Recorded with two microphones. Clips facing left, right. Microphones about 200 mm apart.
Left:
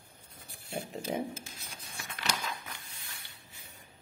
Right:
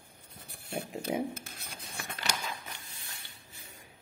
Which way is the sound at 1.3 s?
60° right (ahead or behind).